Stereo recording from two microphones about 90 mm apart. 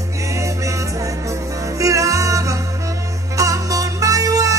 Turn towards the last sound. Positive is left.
turn(degrees=-40)  # may be behind; listen again after turning